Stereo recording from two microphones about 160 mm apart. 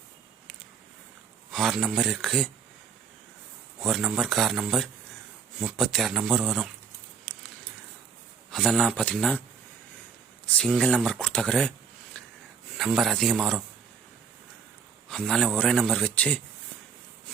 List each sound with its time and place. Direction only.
1.5 s speech: centre (ahead or behind)
3.8 s speech: centre (ahead or behind)
8.4 s speech: centre (ahead or behind)
10.7 s speech: 5° left (ahead or behind)
12.1 s a sound: 5° left (ahead or behind)
12.7 s speech: centre (ahead or behind)
15.1 s speech: 5° left (ahead or behind)